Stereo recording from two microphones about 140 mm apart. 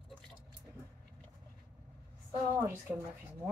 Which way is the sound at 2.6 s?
15° right (ahead or behind).